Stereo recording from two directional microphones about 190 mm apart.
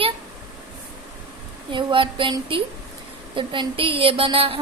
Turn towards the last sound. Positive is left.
turn(degrees=-30)  # may be behind; listen again after turning